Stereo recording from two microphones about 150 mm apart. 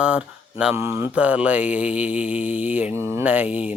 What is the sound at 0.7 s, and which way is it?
Speech, 15° right (ahead or behind).